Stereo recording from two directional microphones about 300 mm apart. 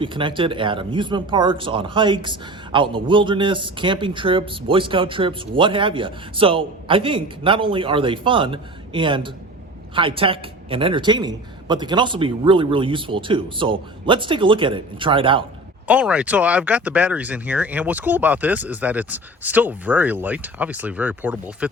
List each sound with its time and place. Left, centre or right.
0.0 s speech: centre
15.9 s speech: centre